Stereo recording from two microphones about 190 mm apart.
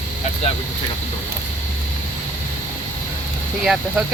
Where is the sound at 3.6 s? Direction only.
5° right (ahead or behind).